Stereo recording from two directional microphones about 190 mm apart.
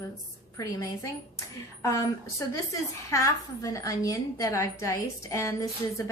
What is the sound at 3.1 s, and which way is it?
A woman's voice, 15° left (ahead or behind).